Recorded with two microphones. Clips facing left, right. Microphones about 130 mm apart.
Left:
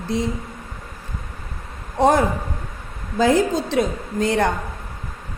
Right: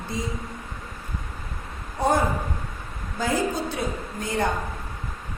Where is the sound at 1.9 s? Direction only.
90° left.